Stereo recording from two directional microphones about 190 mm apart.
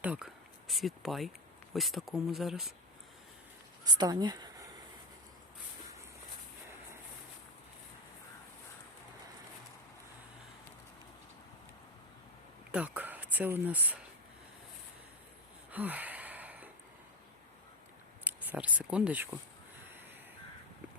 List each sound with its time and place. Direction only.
0.0 s speech: 5° right (ahead or behind)
3.8 s speech: 20° right (ahead or behind)
12.7 s speech: 10° right (ahead or behind)
15.7 s a sound: 10° right (ahead or behind)
18.3 s speech: 10° right (ahead or behind)